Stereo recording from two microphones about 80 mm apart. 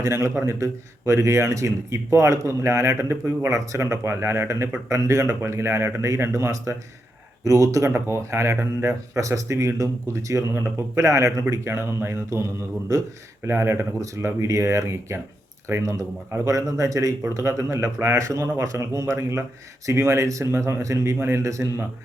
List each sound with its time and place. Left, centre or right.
0.0 s speech: right
7.9 s speech: right
13.5 s speech: right